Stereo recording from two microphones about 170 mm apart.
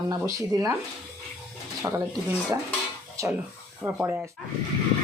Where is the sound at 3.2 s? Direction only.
15° right (ahead or behind).